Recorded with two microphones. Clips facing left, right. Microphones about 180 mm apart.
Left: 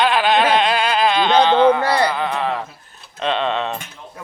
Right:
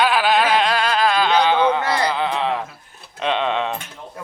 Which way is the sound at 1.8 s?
30° left (ahead or behind).